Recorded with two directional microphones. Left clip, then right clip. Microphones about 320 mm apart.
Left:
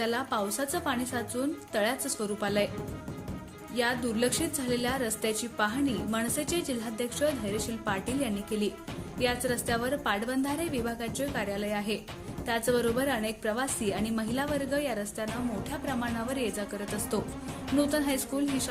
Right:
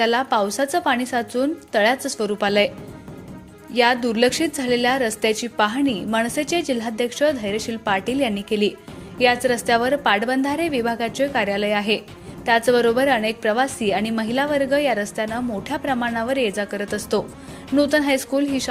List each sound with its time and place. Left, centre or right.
0.0 s a woman's voice: left
3.8 s a woman's voice: left